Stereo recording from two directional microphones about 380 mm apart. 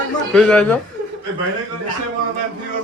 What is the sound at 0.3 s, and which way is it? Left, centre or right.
Speech, centre.